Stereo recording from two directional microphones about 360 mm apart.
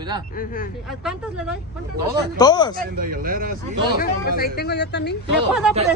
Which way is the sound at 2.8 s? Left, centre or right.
Right.